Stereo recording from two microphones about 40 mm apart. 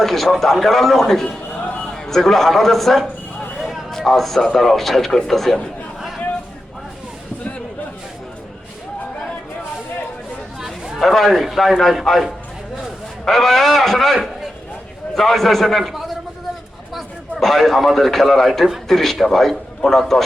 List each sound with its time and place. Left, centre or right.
0.0 s a man's voice: centre
10.9 s a man's voice: centre
17.4 s a man's voice: centre